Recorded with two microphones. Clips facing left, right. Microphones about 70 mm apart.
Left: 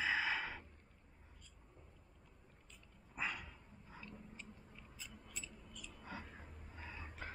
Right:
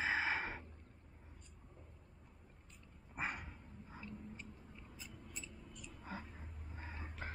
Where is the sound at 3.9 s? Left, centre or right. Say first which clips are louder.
Right 3 dB; right.